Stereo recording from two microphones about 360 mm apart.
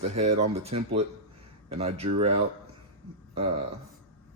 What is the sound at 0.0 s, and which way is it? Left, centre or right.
A man's voice, centre.